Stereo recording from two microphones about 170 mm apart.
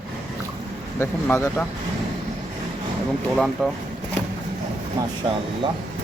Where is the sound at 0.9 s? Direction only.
15° left (ahead or behind).